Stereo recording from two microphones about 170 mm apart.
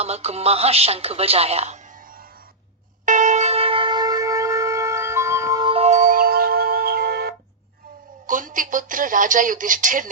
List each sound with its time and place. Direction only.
0.0 s speech: 40° right (ahead or behind)
3.1 s music: 45° right (ahead or behind); by 7.3 s 65° right (ahead or behind)
8.3 s speech: 50° right (ahead or behind)